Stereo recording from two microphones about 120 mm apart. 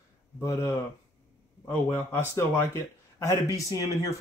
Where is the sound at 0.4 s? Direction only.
25° left (ahead or behind).